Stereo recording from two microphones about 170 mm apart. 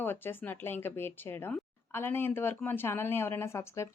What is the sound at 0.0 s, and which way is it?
Speech, 10° left (ahead or behind).